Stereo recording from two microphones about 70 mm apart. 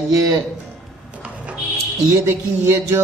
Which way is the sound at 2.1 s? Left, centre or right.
Right.